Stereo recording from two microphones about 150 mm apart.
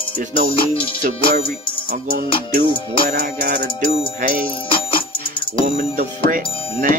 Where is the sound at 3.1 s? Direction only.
60° right (ahead or behind).